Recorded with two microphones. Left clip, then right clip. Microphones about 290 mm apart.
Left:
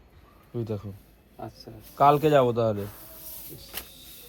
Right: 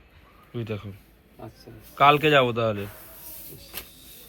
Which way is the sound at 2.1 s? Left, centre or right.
Centre.